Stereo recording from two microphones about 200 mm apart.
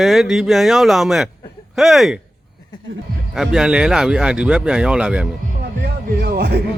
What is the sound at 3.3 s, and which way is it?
Speech, centre (ahead or behind).